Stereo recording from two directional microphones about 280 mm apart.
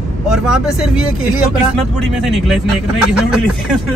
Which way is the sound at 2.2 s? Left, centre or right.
Centre.